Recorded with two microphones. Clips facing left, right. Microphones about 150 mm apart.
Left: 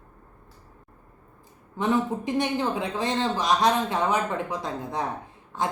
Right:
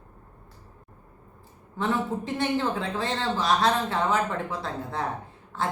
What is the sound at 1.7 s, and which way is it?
Speech, 15° left (ahead or behind).